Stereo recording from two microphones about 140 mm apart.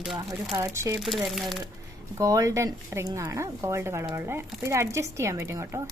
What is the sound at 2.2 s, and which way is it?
A woman's voice, 25° right (ahead or behind).